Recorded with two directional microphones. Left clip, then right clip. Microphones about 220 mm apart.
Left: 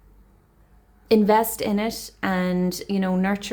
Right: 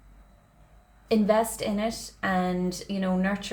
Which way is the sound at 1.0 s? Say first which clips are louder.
Left 5 dB; 40° left (ahead or behind).